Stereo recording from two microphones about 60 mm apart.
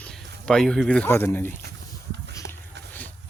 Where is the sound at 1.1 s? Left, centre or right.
Left.